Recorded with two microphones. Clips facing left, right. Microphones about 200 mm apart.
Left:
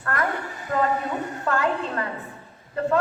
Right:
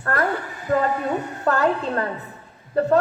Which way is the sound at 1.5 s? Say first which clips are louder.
Right 4 dB; 40° right (ahead or behind).